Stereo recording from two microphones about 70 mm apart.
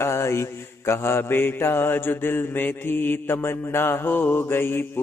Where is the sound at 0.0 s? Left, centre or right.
Left.